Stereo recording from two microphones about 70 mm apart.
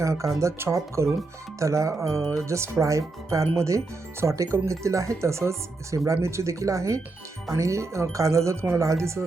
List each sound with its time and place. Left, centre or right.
0.0 s speech: right